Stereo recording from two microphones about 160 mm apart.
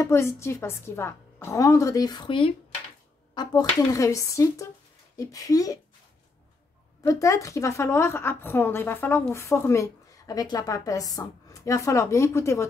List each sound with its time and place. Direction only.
0.0 s a woman's voice: 15° left (ahead or behind)
7.0 s a woman's voice: 20° left (ahead or behind)